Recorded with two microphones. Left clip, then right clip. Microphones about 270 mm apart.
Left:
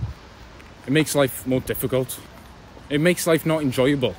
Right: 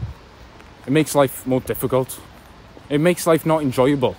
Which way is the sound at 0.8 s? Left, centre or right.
Centre.